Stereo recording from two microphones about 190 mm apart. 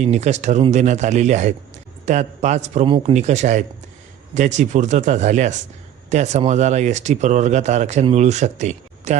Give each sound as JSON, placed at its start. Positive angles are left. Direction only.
{"t": 0.0, "sound": "speech", "side_deg": -35}